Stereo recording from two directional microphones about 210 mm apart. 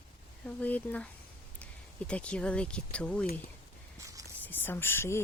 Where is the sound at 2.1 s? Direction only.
5° left (ahead or behind).